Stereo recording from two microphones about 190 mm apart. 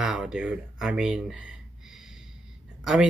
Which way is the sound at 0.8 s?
5° right (ahead or behind).